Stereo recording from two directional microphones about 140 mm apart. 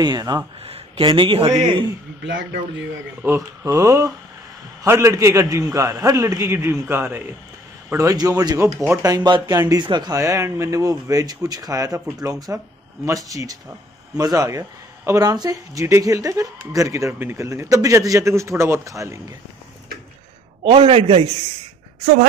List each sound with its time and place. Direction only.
0.0 s speech: 30° right (ahead or behind)
0.6 s a man's voice: 45° right (ahead or behind)
3.2 s speech: 20° right (ahead or behind)
9.1 s speech: 30° right (ahead or behind)
20.6 s a man's voice: 40° right (ahead or behind)